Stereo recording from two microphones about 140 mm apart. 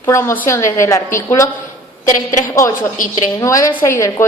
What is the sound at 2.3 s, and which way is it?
Speech, 70° left (ahead or behind).